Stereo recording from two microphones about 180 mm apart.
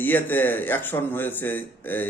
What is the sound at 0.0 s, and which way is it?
Speech, 10° left (ahead or behind).